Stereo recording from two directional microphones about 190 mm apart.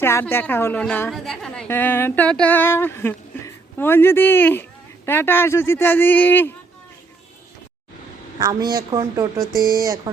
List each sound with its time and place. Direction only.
0.0 s a woman's voice: 10° left (ahead or behind)
8.4 s a woman's voice: 20° right (ahead or behind)